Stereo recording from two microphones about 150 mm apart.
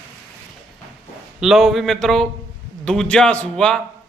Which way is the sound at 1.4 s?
Centre (ahead or behind).